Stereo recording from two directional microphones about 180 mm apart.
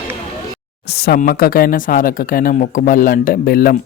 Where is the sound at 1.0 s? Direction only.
55° left (ahead or behind).